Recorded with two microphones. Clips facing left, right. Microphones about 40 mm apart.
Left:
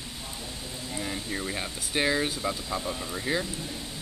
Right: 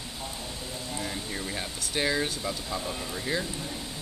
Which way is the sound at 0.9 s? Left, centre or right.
Centre.